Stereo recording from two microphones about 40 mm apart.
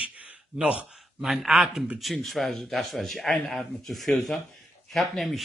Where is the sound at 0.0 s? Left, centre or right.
Right.